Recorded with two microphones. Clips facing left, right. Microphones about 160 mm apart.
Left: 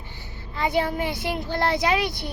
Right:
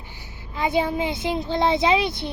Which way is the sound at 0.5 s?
20° right (ahead or behind).